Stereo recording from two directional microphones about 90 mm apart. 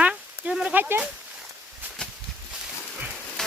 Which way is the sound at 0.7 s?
25° right (ahead or behind).